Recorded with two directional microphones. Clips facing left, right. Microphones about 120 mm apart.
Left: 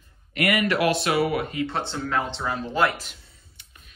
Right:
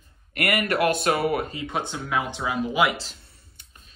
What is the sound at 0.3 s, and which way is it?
Speech, 55° right (ahead or behind).